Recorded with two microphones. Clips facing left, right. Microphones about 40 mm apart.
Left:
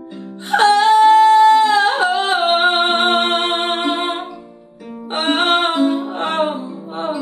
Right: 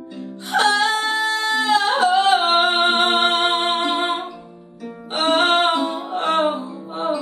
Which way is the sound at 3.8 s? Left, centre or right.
Centre.